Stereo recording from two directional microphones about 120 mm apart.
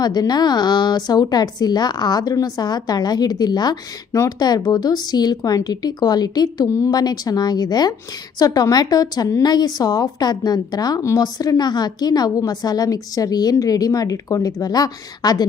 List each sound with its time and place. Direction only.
0.0 s speech: 35° left (ahead or behind)